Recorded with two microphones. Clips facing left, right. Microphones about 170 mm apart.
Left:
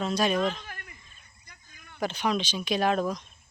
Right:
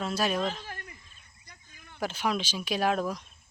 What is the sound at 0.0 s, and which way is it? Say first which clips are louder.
Speech: left 3 dB; 5° right (ahead or behind).